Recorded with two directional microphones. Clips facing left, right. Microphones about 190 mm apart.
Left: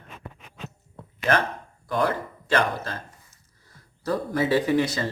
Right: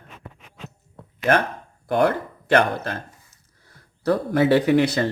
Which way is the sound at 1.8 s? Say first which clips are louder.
Right 5 dB; 60° right (ahead or behind).